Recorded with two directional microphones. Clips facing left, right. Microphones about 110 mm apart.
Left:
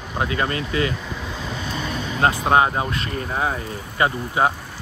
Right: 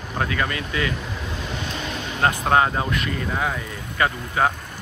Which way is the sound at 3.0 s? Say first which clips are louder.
Left 1 dB; 40° left (ahead or behind).